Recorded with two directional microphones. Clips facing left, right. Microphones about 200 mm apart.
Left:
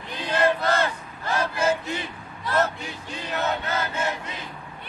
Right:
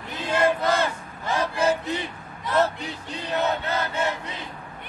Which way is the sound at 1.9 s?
15° right (ahead or behind).